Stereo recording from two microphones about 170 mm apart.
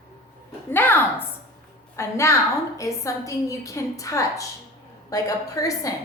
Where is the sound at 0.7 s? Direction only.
10° left (ahead or behind).